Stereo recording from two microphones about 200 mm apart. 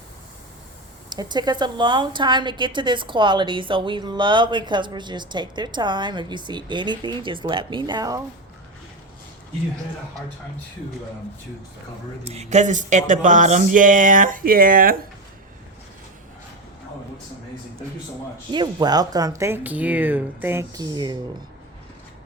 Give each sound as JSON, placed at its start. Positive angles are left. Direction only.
{"t": 1.1, "sound": "a woman's voice", "side_deg": -20}
{"t": 12.2, "sound": "speech", "side_deg": -30}
{"t": 18.5, "sound": "speech", "side_deg": -20}